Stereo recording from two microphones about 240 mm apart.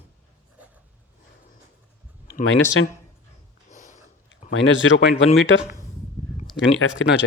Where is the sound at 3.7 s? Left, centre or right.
Left.